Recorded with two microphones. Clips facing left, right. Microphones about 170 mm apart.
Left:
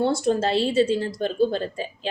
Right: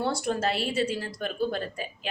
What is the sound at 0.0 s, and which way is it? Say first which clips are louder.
Speech: left 6 dB; 25° left (ahead or behind).